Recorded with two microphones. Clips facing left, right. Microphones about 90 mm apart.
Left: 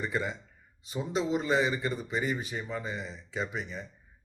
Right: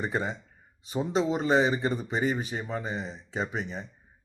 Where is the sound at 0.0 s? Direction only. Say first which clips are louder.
Right 2 dB; 30° right (ahead or behind).